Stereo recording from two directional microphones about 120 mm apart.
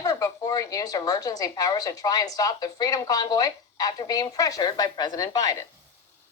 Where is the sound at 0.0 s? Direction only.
30° left (ahead or behind).